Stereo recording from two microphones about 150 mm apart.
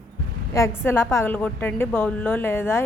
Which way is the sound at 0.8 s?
15° left (ahead or behind).